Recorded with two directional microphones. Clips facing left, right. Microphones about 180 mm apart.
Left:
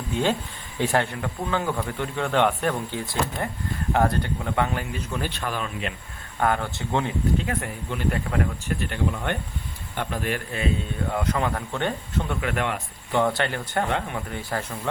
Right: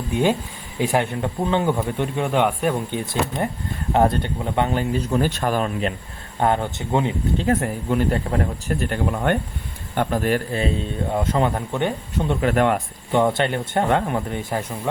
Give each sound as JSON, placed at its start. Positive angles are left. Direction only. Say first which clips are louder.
{"t": 0.1, "sound": "speech", "louder": "right 4 dB", "side_deg": -15}
{"t": 1.2, "sound": "speech", "louder": "right 6 dB", "side_deg": -25}
{"t": 6.4, "sound": "speech", "louder": "right 4 dB", "side_deg": -20}
{"t": 7.3, "sound": "speech", "louder": "right 6 dB", "side_deg": -40}
{"t": 11.1, "sound": "speech", "louder": "right 5 dB", "side_deg": -25}
{"t": 11.7, "sound": "speech", "louder": "right 3 dB", "side_deg": -15}
{"t": 12.3, "sound": "speech", "louder": "right 10 dB", "side_deg": -35}
{"t": 13.1, "sound": "speech", "louder": "right 4 dB", "side_deg": -20}
{"t": 13.8, "sound": "speech", "louder": "right 7 dB", "side_deg": -45}
{"t": 14.3, "sound": "speech", "louder": "right 4 dB", "side_deg": -20}